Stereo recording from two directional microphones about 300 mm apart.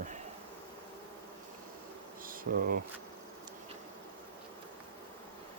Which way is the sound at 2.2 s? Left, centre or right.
Right.